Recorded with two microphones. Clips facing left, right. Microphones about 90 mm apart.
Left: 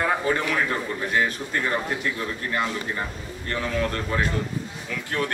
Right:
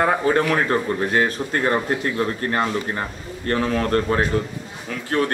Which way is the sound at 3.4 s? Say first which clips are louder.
Right 5 dB; 50° right (ahead or behind).